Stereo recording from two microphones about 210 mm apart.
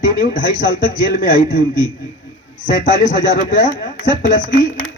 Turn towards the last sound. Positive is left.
turn(degrees=40)  # may be behind; listen again after turning